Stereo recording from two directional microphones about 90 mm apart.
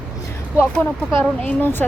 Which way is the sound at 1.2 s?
20° left (ahead or behind).